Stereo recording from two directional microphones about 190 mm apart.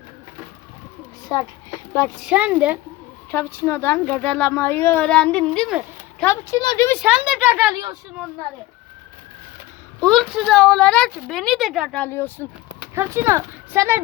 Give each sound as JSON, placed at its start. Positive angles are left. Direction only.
{"t": 1.3, "sound": "speech", "side_deg": 20}
{"t": 2.2, "sound": "speech", "side_deg": -5}
{"t": 3.3, "sound": "speech", "side_deg": 10}
{"t": 6.2, "sound": "speech", "side_deg": 15}
{"t": 7.0, "sound": "speech", "side_deg": -5}
{"t": 10.0, "sound": "a woman's voice", "side_deg": 0}
{"t": 13.0, "sound": "speech", "side_deg": -10}